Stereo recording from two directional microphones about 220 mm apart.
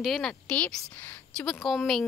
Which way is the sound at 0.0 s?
Centre (ahead or behind).